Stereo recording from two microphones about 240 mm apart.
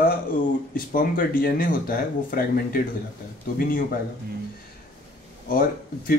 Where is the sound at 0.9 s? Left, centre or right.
Left.